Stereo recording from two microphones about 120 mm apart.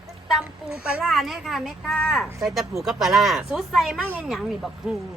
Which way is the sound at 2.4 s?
Centre (ahead or behind).